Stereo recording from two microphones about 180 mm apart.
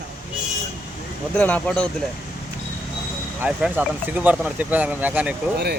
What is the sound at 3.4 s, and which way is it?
Speech, 10° right (ahead or behind).